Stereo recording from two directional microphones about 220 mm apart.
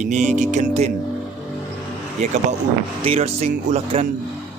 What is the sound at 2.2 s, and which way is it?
Speech, 30° right (ahead or behind).